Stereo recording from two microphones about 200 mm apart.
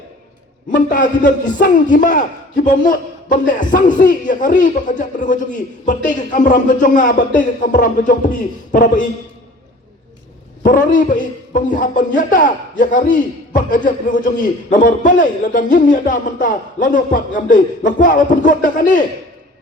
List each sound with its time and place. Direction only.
0.7 s a man's voice: 40° left (ahead or behind)
10.6 s a man's voice: 40° left (ahead or behind)